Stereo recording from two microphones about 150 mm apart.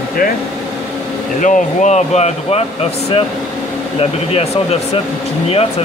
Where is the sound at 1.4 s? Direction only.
55° left (ahead or behind).